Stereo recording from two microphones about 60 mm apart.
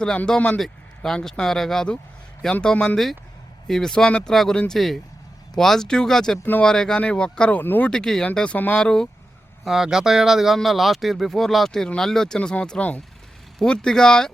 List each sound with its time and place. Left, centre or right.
0.3 s speech: centre
0.6 s speech: centre
7.6 s speech: left
7.9 s speech: centre
8.4 s speech: left
8.8 s speech: centre
9.6 s speech: centre